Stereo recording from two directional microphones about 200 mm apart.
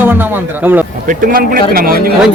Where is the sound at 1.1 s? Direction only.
45° right (ahead or behind).